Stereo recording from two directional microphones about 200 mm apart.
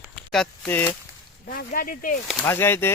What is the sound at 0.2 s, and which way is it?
Speech, 5° left (ahead or behind).